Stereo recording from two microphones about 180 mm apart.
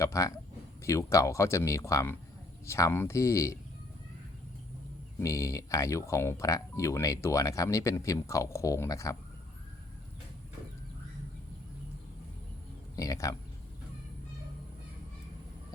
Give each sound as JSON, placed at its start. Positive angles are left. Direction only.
{"t": 0.0, "sound": "speech", "side_deg": 15}
{"t": 5.2, "sound": "speech", "side_deg": 20}
{"t": 13.0, "sound": "speech", "side_deg": 20}